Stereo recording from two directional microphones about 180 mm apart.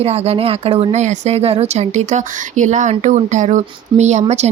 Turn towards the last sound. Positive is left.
turn(degrees=-40)  # may be behind; listen again after turning